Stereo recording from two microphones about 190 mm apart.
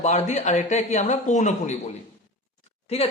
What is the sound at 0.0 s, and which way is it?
Speech, 35° left (ahead or behind).